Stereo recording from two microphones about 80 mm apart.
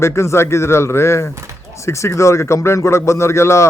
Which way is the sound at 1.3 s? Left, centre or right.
Right.